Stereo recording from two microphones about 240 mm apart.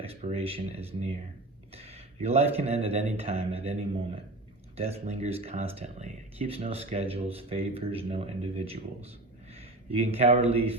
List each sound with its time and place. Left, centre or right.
0.0 s speech: right